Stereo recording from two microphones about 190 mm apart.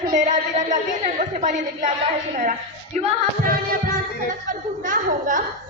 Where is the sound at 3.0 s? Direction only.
40° right (ahead or behind).